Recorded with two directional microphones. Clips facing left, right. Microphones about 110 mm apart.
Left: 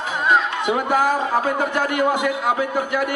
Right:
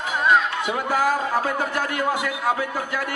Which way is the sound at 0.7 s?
20° left (ahead or behind).